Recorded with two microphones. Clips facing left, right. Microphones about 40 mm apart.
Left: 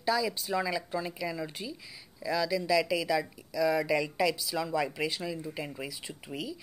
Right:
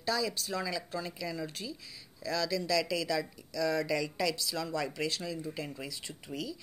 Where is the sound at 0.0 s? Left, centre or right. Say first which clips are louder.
Left 3 dB; centre.